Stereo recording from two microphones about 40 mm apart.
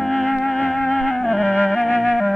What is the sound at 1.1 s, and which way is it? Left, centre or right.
Music, centre.